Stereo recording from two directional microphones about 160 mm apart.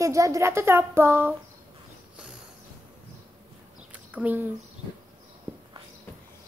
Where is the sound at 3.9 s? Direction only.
10° right (ahead or behind).